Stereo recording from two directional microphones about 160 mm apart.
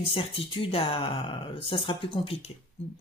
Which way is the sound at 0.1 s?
35° left (ahead or behind).